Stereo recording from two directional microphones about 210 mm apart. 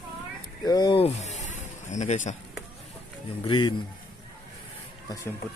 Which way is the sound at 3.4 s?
20° left (ahead or behind).